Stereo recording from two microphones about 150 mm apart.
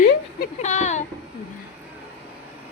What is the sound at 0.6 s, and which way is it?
Speech, 50° left (ahead or behind).